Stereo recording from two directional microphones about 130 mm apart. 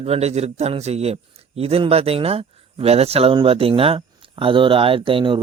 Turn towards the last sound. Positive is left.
turn(degrees=-40)  # may be behind; listen again after turning